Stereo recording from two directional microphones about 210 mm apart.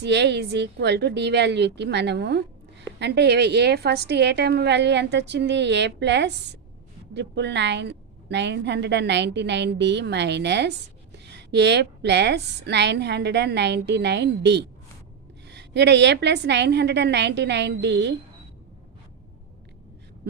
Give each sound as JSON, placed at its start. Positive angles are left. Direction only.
{"t": 0.0, "sound": "a woman's voice", "side_deg": -55}